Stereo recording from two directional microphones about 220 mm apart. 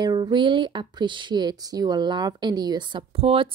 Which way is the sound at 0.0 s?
20° right (ahead or behind).